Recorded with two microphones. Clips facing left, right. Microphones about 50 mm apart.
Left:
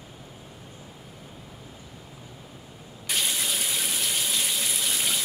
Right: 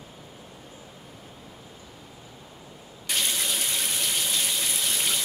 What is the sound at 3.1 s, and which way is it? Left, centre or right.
Water tap, centre.